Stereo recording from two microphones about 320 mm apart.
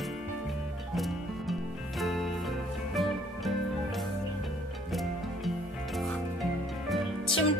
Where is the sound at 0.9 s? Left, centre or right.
Centre.